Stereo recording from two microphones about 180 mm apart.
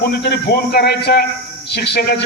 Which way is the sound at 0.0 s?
65° left (ahead or behind).